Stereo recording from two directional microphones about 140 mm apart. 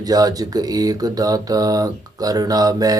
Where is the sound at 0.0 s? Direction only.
25° right (ahead or behind).